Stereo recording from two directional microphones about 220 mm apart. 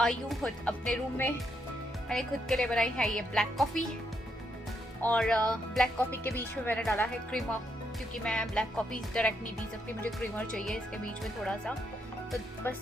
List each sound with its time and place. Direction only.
0.0 s speech: centre (ahead or behind)
5.0 s speech: 5° left (ahead or behind)